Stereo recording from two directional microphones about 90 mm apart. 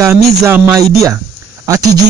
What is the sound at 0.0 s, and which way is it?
Speech, 35° right (ahead or behind).